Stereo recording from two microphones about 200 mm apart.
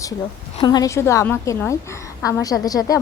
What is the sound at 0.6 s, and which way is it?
A woman's voice, 20° left (ahead or behind).